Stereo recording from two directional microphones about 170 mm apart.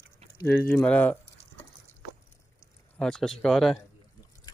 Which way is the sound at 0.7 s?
10° left (ahead or behind).